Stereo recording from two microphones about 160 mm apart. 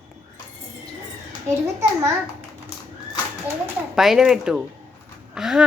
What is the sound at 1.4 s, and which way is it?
Speech, 15° right (ahead or behind).